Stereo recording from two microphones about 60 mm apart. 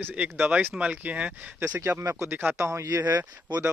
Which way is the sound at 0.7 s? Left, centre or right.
Right.